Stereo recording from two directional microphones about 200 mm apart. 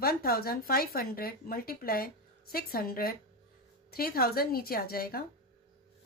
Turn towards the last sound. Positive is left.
turn(degrees=50)  # may be behind; listen again after turning